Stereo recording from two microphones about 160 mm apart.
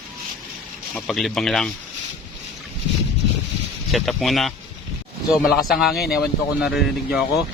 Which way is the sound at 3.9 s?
Centre (ahead or behind).